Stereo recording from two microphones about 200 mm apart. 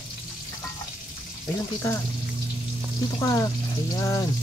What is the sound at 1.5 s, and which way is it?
Speech, 10° left (ahead or behind).